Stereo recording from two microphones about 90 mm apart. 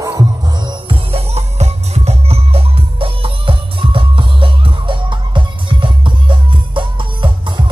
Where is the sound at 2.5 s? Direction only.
90° right.